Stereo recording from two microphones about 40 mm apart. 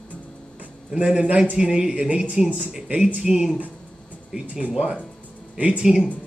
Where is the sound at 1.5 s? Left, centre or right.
Right.